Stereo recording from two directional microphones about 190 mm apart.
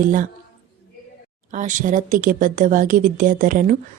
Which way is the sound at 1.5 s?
40° right (ahead or behind).